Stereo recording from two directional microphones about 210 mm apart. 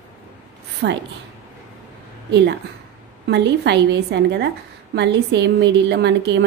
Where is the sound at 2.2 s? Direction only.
55° right (ahead or behind).